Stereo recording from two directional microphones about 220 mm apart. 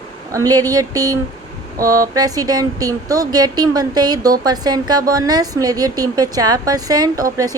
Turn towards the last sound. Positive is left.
turn(degrees=-15)  # may be behind; listen again after turning